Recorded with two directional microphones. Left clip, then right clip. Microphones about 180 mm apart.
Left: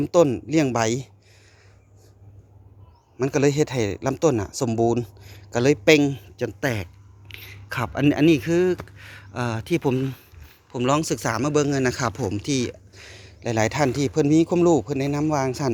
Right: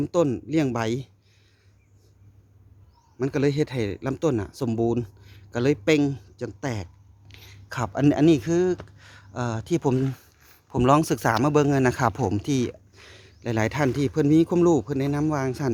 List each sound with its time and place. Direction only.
0.0 s speech: 10° right (ahead or behind)
3.2 s speech: 10° right (ahead or behind)
9.0 s a sound: 10° right (ahead or behind)
10.7 s speech: 30° right (ahead or behind)